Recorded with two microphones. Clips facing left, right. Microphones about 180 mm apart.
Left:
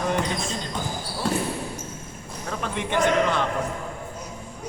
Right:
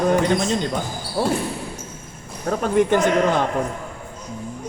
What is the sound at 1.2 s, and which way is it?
Speech, 50° right (ahead or behind).